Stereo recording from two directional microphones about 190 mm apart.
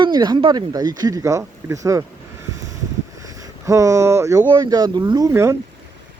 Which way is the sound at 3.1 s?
20° right (ahead or behind).